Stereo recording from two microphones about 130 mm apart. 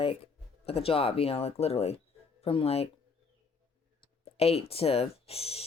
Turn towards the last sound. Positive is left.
turn(degrees=50)  # may be behind; listen again after turning